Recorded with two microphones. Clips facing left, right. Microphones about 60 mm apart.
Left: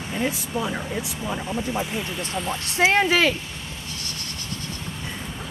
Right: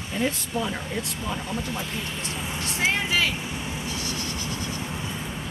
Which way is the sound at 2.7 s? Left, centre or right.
Left.